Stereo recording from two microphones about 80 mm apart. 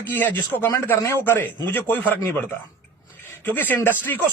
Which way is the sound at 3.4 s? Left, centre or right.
Left.